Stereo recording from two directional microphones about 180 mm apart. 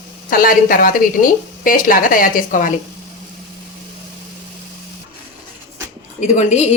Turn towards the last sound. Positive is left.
turn(degrees=40)  # may be behind; listen again after turning